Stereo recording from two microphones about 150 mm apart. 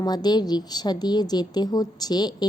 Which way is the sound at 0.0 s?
25° left (ahead or behind).